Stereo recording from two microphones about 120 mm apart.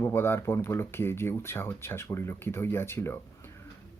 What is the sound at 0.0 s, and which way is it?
A man's voice, 20° left (ahead or behind).